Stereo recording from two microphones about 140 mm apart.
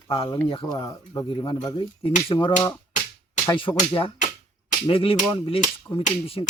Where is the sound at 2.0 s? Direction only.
40° left (ahead or behind).